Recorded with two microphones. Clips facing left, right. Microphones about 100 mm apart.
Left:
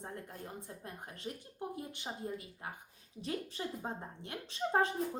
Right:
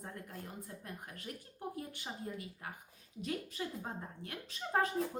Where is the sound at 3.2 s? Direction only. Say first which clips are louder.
Left 1 dB; 30° left (ahead or behind).